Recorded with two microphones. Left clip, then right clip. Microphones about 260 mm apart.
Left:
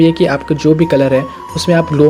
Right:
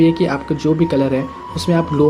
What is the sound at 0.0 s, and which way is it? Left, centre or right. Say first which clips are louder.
Speech: left 4 dB; left.